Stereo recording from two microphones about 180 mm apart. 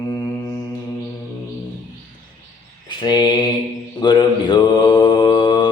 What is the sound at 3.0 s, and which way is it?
Mantra, 25° left (ahead or behind).